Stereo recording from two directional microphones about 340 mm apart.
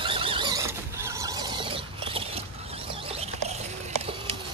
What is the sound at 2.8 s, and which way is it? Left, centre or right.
Rodents, centre.